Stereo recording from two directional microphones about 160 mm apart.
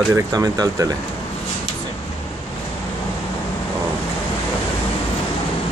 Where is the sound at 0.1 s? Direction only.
20° right (ahead or behind).